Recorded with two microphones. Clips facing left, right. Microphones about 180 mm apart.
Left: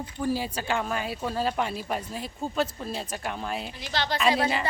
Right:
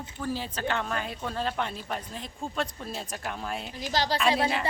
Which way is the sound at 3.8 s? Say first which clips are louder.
Right 3 dB; 40° right (ahead or behind).